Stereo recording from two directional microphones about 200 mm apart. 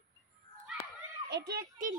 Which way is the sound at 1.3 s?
55° right (ahead or behind).